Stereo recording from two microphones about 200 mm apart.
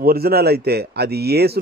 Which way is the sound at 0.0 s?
50° right (ahead or behind).